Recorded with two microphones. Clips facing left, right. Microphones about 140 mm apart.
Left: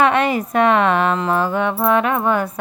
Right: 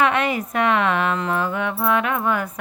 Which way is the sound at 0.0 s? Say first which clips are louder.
Left 4 dB; 35° left (ahead or behind).